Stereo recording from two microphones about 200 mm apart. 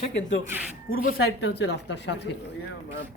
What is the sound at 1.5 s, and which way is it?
Speech, 60° left (ahead or behind).